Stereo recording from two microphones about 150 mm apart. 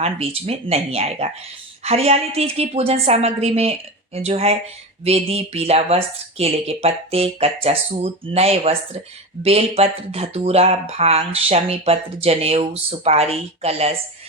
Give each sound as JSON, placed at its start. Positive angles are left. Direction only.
{"t": 0.0, "sound": "speech", "side_deg": -40}